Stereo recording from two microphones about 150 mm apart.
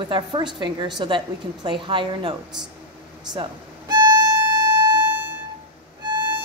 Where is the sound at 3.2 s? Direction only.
30° right (ahead or behind).